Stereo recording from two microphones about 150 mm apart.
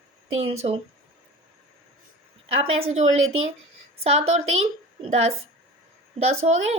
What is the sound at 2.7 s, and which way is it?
A woman's voice, 45° right (ahead or behind).